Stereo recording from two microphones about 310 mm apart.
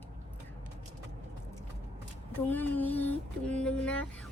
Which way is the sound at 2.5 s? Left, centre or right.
Centre.